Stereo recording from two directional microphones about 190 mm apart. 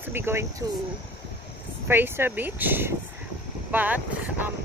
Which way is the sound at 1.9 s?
10° right (ahead or behind).